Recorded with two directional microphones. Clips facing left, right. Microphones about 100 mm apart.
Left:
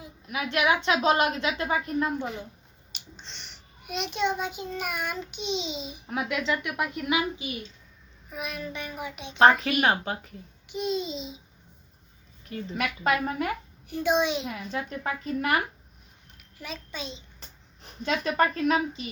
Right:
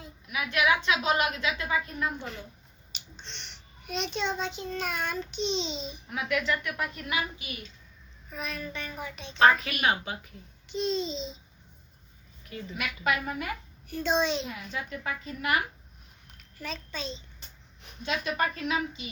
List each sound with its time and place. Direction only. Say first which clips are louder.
0.3 s a woman's voice: left 1 dB; 30° left (ahead or behind)
2.9 s finger snapping: even; 5° left (ahead or behind)
3.8 s child singing: left 3 dB; 5° left (ahead or behind)
6.2 s a woman's voice: right 1 dB; 20° left (ahead or behind)
8.3 s child singing: left 2 dB; 15° left (ahead or behind)
9.4 s a woman's voice: left 3 dB; 30° left (ahead or behind)
10.7 s child singing: even; 10° left (ahead or behind)
12.5 s a woman's voice: left 5 dB; 35° left (ahead or behind)
13.8 s child singing: left 3 dB; 15° left (ahead or behind)
14.7 s a woman's voice: left 6 dB; 35° left (ahead or behind)
16.6 s child singing: even; 15° left (ahead or behind)
17.8 s a woman's voice: left 4 dB; 40° left (ahead or behind)